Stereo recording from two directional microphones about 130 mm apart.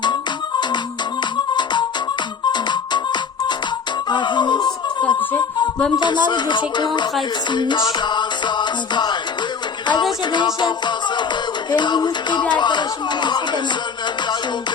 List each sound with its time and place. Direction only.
2.5 s music: 35° left (ahead or behind)
4.1 s a sound: 35° left (ahead or behind)
6.0 s music: 35° left (ahead or behind)